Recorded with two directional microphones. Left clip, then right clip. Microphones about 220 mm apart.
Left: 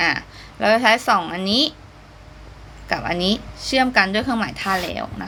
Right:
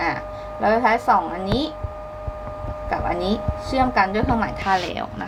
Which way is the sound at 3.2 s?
50° left (ahead or behind).